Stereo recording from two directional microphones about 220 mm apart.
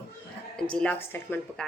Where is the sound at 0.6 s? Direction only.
5° left (ahead or behind).